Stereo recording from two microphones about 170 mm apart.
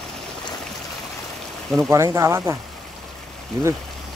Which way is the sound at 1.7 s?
15° right (ahead or behind).